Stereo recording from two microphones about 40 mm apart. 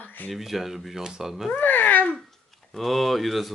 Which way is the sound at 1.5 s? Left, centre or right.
Left.